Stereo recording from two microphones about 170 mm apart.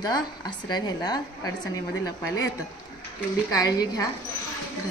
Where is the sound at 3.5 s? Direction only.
20° left (ahead or behind).